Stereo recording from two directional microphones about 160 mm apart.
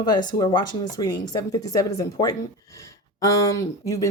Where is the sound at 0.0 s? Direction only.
25° left (ahead or behind).